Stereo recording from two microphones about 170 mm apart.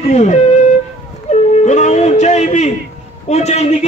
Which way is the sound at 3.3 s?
40° left (ahead or behind).